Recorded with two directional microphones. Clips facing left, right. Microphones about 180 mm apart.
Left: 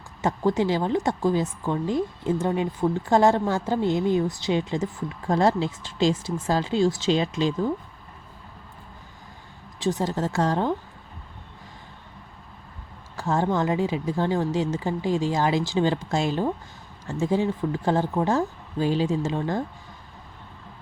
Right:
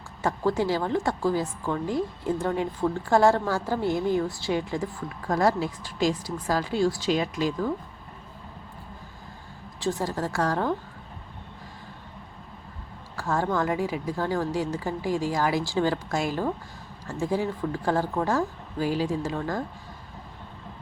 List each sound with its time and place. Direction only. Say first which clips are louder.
0.2 s a woman's voice: left 2 dB; 20° left (ahead or behind)
9.8 s a woman's voice: left 3 dB; 20° left (ahead or behind)
13.1 s a woman's voice: left 2 dB; 20° left (ahead or behind)